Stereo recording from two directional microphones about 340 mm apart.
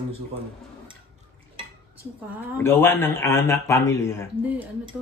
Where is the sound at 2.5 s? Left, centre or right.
Centre.